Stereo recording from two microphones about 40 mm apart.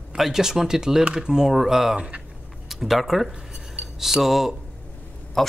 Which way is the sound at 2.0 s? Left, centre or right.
Right.